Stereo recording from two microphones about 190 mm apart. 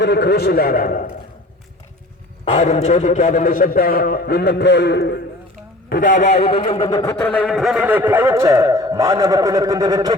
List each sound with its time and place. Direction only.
0.0 s a man's voice: 60° left (ahead or behind)
2.4 s a man's voice: 35° left (ahead or behind); by 5.2 s 65° left (ahead or behind)
5.9 s a man's voice: 45° left (ahead or behind); by 7.1 s 20° left (ahead or behind)
7.2 s speech: 5° left (ahead or behind); by 10.2 s 20° right (ahead or behind)